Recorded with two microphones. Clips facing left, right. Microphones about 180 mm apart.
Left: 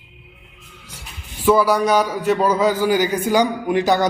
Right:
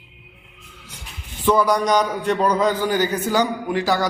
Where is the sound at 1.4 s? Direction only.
5° left (ahead or behind).